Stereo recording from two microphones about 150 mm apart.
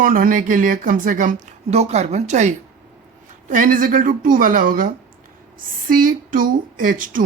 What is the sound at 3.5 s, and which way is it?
Speech, 60° right (ahead or behind).